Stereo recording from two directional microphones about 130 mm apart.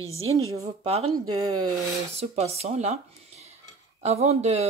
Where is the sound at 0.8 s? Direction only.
50° right (ahead or behind).